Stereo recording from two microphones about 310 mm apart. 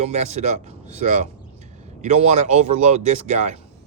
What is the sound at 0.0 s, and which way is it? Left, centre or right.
Speech, right.